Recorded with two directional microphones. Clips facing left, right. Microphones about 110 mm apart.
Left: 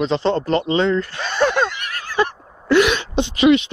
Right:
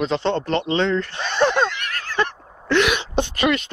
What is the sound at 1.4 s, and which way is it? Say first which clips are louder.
Snicker: left 1 dB; 20° right (ahead or behind).